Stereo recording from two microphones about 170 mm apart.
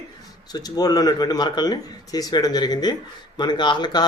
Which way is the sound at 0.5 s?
20° left (ahead or behind).